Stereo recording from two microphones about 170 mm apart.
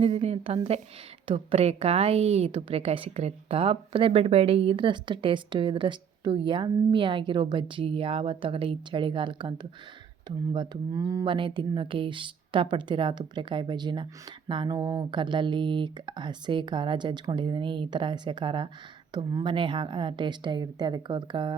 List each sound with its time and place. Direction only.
0.0 s a woman's voice: 35° right (ahead or behind)